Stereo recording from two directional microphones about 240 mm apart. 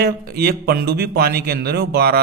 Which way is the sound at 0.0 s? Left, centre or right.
Right.